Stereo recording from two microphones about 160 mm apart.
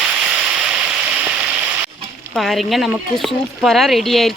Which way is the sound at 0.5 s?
10° right (ahead or behind).